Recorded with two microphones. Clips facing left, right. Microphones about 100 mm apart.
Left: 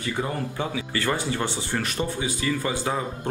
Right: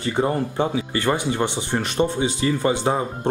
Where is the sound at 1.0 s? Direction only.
20° right (ahead or behind).